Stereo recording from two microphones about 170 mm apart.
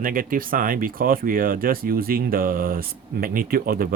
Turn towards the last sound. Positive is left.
turn(degrees=-60)  # may be behind; listen again after turning